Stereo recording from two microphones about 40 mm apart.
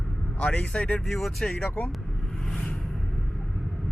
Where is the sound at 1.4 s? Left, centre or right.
Left.